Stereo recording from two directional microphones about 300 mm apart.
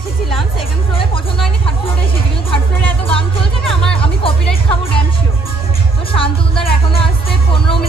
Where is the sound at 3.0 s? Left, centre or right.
Centre.